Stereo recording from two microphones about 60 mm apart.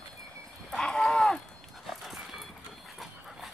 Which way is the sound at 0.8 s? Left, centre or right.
Centre.